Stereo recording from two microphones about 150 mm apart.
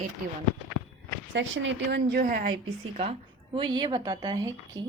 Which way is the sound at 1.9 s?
70° right (ahead or behind).